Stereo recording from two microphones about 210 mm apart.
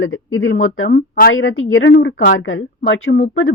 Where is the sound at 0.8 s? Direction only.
40° left (ahead or behind).